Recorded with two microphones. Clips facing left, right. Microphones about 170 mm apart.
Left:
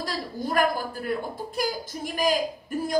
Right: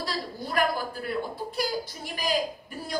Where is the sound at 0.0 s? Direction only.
45° left (ahead or behind).